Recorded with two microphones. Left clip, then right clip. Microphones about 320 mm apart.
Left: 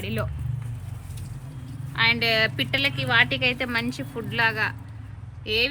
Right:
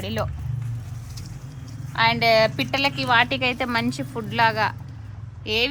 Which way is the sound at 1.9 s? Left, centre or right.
Right.